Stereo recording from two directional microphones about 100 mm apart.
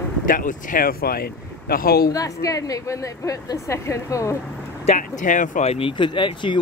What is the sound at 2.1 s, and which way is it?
A woman's voice, 35° left (ahead or behind).